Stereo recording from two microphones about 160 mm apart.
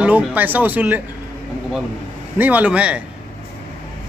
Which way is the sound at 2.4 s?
10° right (ahead or behind).